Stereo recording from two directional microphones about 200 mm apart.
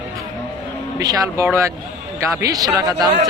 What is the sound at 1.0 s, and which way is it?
A man's voice, 20° right (ahead or behind).